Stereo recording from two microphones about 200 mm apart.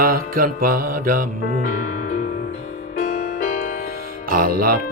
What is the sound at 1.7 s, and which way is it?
Music, 40° left (ahead or behind).